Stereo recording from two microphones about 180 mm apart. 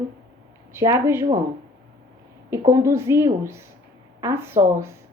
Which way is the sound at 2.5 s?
15° right (ahead or behind).